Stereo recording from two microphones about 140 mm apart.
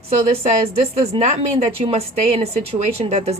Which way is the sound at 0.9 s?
50° right (ahead or behind).